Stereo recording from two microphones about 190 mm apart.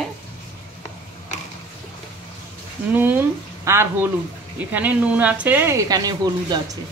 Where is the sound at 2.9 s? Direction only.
10° right (ahead or behind).